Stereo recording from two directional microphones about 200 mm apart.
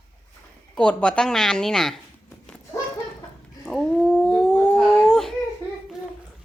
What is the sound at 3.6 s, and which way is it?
Dog, centre (ahead or behind).